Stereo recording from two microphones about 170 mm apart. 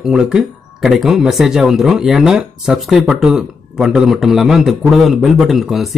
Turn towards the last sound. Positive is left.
turn(degrees=0)  # may be behind; listen again after turning